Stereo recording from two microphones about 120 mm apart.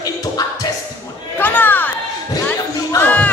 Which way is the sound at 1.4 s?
15° left (ahead or behind).